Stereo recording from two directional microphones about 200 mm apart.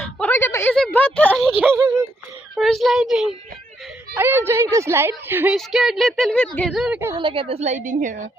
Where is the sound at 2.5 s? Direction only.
Centre (ahead or behind).